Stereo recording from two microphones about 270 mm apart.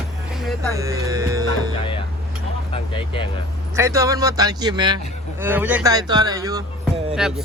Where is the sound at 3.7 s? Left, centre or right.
Centre.